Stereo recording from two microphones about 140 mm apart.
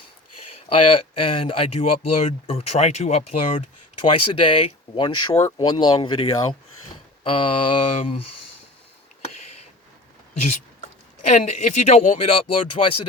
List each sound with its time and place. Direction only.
0.7 s speech: 40° left (ahead or behind)
4.0 s speech: 40° left (ahead or behind)
7.3 s speech: 40° left (ahead or behind)
11.2 s speech: 60° left (ahead or behind); by 13.1 s 40° left (ahead or behind)